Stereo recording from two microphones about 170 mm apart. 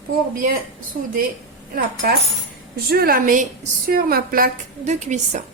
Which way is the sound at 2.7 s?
65° right (ahead or behind).